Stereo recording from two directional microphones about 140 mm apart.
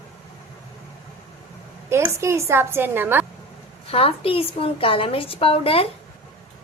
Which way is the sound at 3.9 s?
45° left (ahead or behind).